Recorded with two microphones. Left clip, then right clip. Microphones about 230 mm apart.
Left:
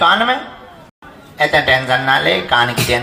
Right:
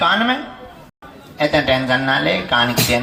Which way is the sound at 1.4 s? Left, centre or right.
Left.